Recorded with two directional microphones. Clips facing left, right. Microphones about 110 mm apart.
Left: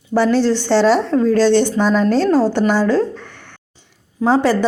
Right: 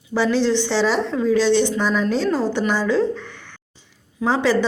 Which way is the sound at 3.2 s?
55° left (ahead or behind).